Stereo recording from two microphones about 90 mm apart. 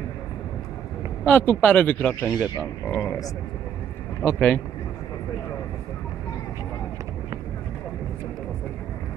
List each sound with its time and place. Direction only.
1.2 s speech: 15° left (ahead or behind)
3.0 s speech: 40° left (ahead or behind)
4.2 s speech: 20° left (ahead or behind)